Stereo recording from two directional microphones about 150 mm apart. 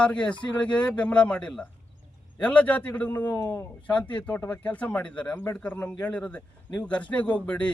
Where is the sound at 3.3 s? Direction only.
25° left (ahead or behind).